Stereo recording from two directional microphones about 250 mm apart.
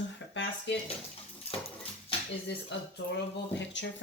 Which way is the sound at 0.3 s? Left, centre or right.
Left.